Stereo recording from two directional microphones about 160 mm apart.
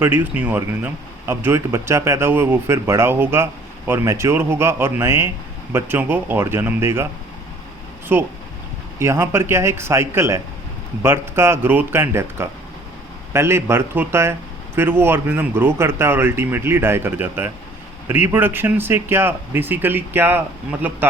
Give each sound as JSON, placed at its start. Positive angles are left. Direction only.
{"t": 0.0, "sound": "speech", "side_deg": -15}
{"t": 8.1, "sound": "speech", "side_deg": -15}